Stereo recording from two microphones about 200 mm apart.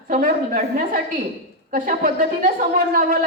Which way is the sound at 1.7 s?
40° right (ahead or behind).